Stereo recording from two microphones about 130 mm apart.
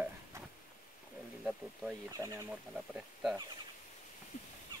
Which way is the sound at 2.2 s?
20° right (ahead or behind).